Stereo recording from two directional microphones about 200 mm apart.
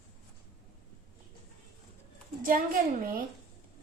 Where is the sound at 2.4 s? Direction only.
45° right (ahead or behind).